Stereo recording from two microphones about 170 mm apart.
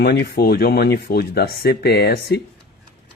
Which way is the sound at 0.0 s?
65° left (ahead or behind).